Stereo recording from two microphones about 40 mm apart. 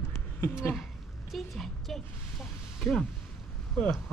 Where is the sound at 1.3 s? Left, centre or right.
Centre.